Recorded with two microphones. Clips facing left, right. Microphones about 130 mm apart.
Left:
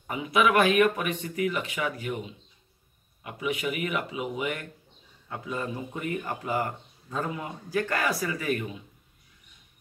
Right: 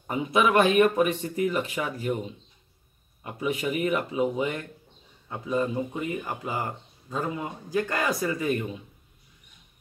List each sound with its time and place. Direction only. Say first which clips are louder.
0.1 s speech: right 1 dB; 30° right (ahead or behind)